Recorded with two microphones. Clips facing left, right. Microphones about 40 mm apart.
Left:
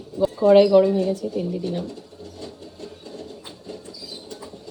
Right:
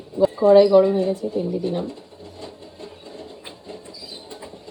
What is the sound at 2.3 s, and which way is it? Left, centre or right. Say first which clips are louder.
Music: even; right.